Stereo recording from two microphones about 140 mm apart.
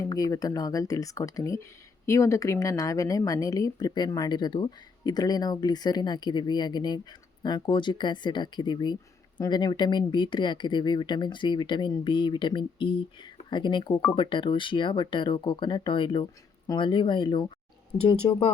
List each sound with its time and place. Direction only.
0.0 s a woman's voice: 25° left (ahead or behind)